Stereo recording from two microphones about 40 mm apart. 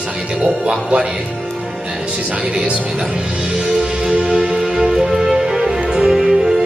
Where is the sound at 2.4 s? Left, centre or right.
Centre.